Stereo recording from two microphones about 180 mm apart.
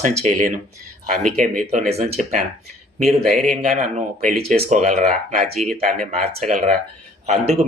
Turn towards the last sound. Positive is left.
turn(degrees=-40)  # may be behind; listen again after turning